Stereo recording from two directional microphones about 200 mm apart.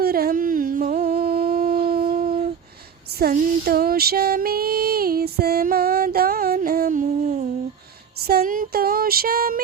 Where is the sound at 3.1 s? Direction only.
50° right (ahead or behind).